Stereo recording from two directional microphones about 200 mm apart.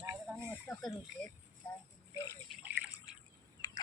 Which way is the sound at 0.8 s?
Centre (ahead or behind).